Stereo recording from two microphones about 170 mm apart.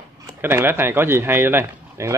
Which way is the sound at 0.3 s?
15° right (ahead or behind).